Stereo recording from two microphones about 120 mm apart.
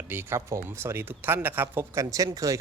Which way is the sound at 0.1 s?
20° right (ahead or behind).